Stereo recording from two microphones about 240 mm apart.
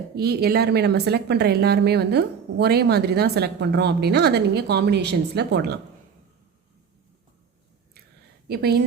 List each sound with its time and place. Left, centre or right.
0.2 s speech: right
8.4 s speech: right